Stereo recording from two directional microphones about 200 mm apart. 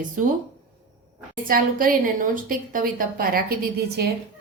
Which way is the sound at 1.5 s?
45° right (ahead or behind).